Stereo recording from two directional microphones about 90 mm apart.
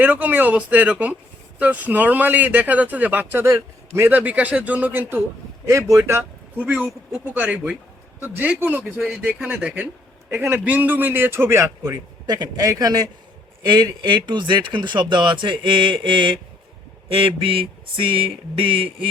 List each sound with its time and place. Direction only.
0.0 s speech: 20° right (ahead or behind)
3.4 s a man's voice: 30° right (ahead or behind)
5.6 s speech: 35° right (ahead or behind)
6.6 s a man's voice: 20° right (ahead or behind)
9.8 s a man's voice: 25° right (ahead or behind)
11.8 s speech: 45° right (ahead or behind); by 16.4 s 65° right (ahead or behind)
17.1 s a sound: 85° right